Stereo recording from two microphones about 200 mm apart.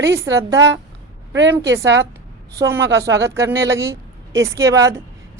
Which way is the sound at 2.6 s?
10° right (ahead or behind).